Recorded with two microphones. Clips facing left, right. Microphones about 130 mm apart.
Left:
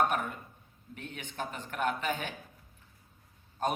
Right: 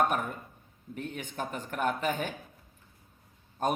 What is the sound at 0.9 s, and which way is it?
A man's voice, 45° right (ahead or behind).